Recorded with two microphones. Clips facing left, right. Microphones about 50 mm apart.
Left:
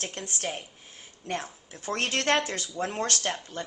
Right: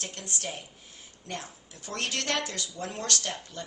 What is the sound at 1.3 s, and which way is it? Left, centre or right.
A woman's voice, left.